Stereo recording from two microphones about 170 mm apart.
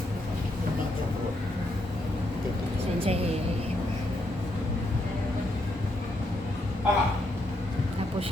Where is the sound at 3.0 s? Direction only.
35° right (ahead or behind).